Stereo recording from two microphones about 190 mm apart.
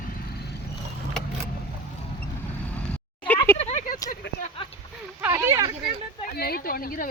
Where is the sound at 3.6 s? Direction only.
35° left (ahead or behind).